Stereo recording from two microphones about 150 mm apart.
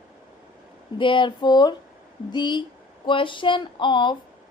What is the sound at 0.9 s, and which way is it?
A woman's voice, 35° left (ahead or behind).